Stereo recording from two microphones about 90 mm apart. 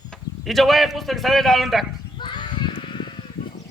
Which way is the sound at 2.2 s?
55° left (ahead or behind).